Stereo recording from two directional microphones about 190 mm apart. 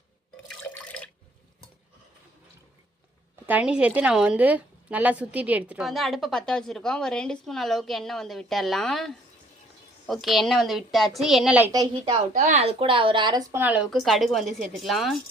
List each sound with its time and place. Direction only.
0.5 s water: 5° left (ahead or behind)
3.4 s a woman's voice: 5° right (ahead or behind)
11.7 s a woman's voice: 20° right (ahead or behind)
12.3 s a woman's voice: 40° right (ahead or behind); by 15.2 s centre (ahead or behind)